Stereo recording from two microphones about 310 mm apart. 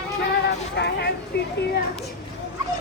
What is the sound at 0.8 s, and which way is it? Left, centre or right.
Speech, left.